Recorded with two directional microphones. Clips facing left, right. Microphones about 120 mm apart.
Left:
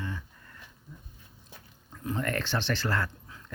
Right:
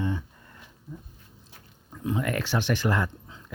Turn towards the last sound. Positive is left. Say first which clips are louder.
# right 4 dB
turn(degrees=-20)  # may be behind; listen again after turning